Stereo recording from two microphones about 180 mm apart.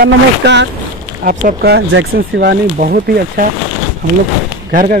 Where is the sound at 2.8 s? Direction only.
55° right (ahead or behind).